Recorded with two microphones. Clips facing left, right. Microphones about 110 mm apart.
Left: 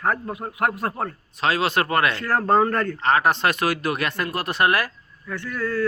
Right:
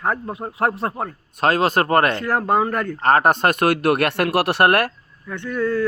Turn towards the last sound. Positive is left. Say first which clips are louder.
# right 4 dB
turn(degrees=-20)  # may be behind; listen again after turning